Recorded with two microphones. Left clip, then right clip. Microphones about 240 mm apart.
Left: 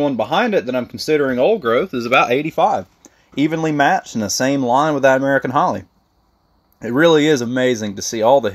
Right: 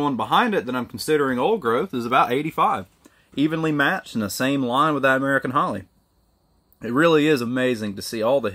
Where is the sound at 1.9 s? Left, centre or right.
Right.